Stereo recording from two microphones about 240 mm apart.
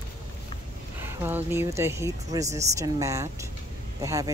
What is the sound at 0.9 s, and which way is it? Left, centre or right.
Speech, centre.